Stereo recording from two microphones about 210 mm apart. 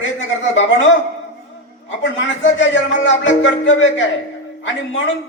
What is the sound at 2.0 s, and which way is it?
A man's voice, 60° left (ahead or behind).